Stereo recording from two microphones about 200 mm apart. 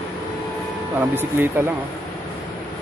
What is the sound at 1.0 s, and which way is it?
Speech, 10° right (ahead or behind).